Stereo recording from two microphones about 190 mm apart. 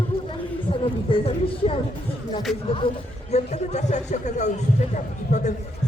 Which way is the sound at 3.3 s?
35° left (ahead or behind).